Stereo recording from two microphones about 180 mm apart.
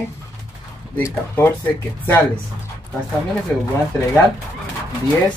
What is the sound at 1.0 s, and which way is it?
Speech, 15° left (ahead or behind).